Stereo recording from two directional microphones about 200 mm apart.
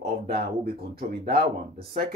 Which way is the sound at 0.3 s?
50° right (ahead or behind).